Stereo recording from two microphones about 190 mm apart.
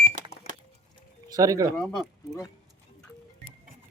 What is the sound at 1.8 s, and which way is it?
Speech, centre (ahead or behind).